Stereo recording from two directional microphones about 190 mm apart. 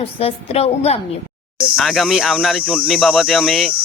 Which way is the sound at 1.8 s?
Centre (ahead or behind).